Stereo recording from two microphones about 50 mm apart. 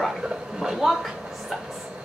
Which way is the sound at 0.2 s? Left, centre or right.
Centre.